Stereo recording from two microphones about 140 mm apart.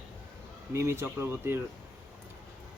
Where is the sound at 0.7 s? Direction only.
20° right (ahead or behind).